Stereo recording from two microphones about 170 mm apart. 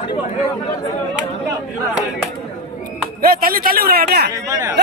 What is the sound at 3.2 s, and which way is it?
Speech, 60° right (ahead or behind).